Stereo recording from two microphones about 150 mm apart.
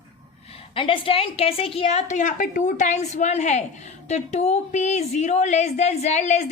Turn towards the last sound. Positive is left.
turn(degrees=50)  # may be behind; listen again after turning